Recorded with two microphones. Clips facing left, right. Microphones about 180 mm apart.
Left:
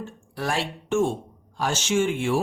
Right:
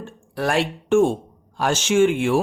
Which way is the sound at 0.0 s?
60° right (ahead or behind).